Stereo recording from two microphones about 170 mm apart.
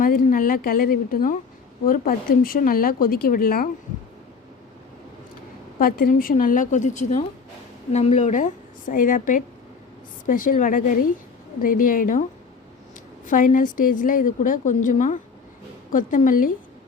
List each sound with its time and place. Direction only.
0.0 s speech: 55° left (ahead or behind)
5.8 s a woman's voice: 55° left (ahead or behind)
13.2 s a woman's voice: 50° left (ahead or behind)